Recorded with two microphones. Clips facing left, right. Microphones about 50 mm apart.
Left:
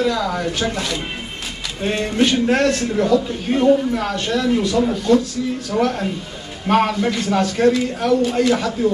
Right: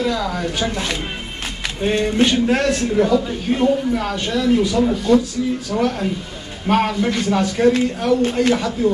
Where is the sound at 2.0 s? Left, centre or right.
Centre.